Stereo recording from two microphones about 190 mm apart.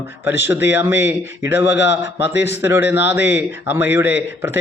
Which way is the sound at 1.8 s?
65° left (ahead or behind).